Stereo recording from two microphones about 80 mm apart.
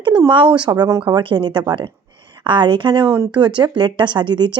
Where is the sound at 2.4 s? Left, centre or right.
Right.